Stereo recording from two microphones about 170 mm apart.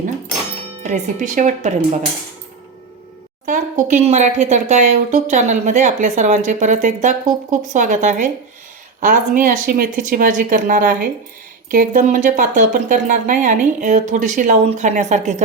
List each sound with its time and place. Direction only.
0.8 s speech: 45° right (ahead or behind)
3.4 s speech: 50° right (ahead or behind)